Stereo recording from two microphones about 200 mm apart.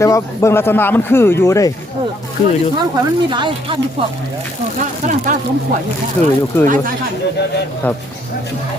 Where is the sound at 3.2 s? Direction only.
25° right (ahead or behind).